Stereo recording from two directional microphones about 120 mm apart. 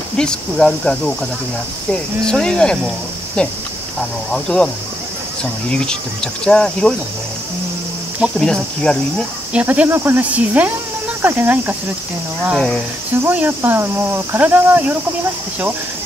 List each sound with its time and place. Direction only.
0.2 s speech: 5° left (ahead or behind)
8.4 s speech: 5° left (ahead or behind)
9.5 s speech: 10° right (ahead or behind)
13.2 s speech: 15° right (ahead or behind)